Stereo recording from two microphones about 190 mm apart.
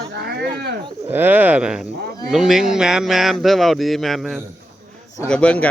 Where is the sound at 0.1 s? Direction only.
55° right (ahead or behind).